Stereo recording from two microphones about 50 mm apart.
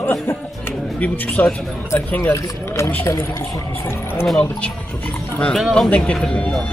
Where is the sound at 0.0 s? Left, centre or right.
Left.